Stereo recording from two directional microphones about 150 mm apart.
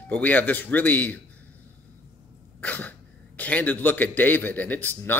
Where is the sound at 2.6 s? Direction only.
10° left (ahead or behind).